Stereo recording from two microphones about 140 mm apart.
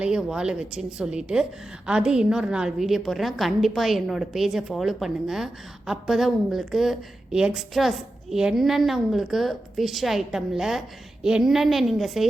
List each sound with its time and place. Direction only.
0.0 s a woman's voice: 5° right (ahead or behind)